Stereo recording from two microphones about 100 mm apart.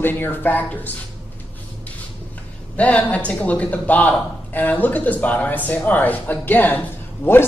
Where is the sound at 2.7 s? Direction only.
15° left (ahead or behind).